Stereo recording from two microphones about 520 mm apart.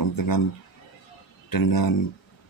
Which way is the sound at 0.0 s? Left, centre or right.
Left.